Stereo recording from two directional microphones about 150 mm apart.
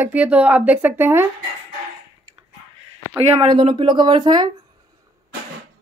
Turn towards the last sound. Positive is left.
turn(degrees=-30)  # may be behind; listen again after turning